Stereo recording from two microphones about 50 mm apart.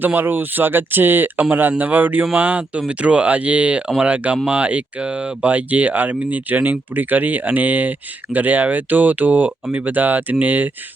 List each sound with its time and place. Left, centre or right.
0.0 s speech: right